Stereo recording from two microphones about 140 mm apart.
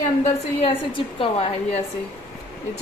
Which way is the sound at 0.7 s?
35° left (ahead or behind).